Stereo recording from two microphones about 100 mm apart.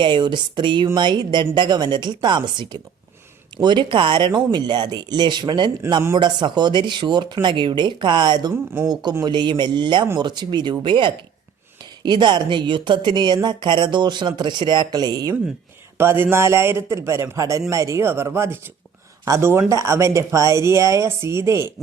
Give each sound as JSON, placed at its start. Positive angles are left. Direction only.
{"t": 0.0, "sound": "a woman's voice", "side_deg": -50}
{"t": 16.0, "sound": "a man's voice", "side_deg": -20}